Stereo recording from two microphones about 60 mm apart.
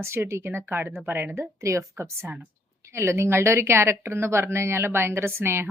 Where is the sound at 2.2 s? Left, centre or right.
Right.